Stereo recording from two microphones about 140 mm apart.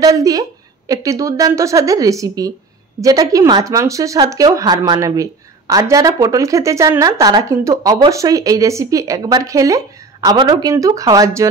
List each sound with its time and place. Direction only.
0.0 s speech: 25° right (ahead or behind)